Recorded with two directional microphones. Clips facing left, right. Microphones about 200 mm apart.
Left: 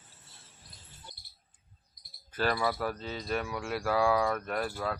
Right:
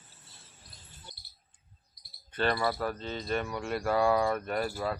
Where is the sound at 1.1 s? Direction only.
20° left (ahead or behind).